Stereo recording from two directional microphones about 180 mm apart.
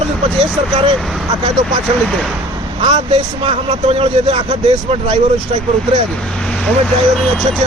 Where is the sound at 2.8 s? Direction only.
25° right (ahead or behind).